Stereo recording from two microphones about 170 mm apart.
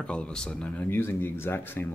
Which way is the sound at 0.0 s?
5° left (ahead or behind).